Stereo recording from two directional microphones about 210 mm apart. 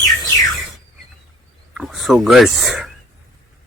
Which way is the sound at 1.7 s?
Centre (ahead or behind).